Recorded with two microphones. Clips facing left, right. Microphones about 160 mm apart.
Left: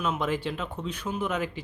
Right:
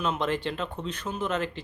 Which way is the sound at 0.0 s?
5° left (ahead or behind).